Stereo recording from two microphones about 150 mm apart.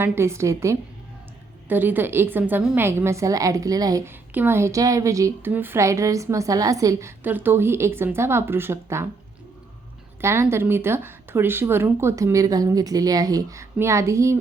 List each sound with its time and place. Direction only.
0.0 s a woman's voice: 15° right (ahead or behind)
7.3 s a woman's voice: 10° right (ahead or behind)
10.2 s speech: 15° right (ahead or behind)